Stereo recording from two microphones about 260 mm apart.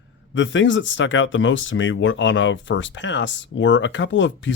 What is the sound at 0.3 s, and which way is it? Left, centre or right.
Speech, left.